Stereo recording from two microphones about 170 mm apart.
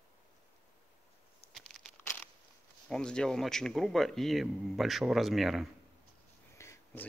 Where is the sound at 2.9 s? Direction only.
5° left (ahead or behind).